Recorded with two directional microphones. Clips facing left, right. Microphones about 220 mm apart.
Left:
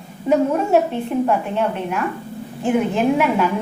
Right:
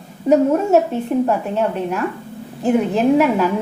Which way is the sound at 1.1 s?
40° right (ahead or behind).